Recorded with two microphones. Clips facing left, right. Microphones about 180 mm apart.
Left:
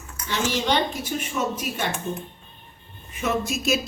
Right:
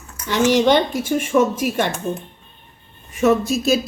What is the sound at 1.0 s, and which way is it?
Speech, 50° right (ahead or behind).